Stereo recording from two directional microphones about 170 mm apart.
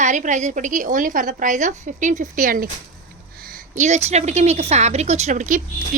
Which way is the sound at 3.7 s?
45° right (ahead or behind).